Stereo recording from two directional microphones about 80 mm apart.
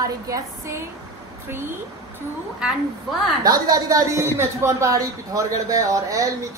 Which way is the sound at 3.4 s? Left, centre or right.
Right.